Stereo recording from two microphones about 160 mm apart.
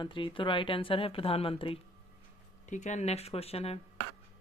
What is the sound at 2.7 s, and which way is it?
A woman's voice, 50° left (ahead or behind).